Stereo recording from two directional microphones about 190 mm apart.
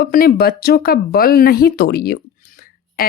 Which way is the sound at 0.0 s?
50° left (ahead or behind).